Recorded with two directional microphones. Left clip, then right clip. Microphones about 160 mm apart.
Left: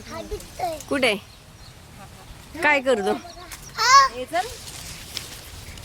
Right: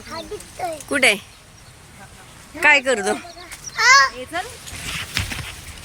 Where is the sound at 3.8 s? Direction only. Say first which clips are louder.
Right 2 dB; 40° right (ahead or behind).